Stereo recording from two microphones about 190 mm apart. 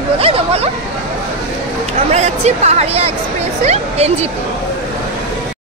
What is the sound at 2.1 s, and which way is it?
Speech, 35° right (ahead or behind).